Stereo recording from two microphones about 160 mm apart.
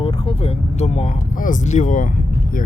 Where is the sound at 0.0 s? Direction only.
35° left (ahead or behind).